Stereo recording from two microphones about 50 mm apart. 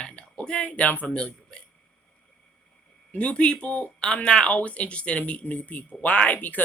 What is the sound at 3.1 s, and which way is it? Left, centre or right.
Speech, left.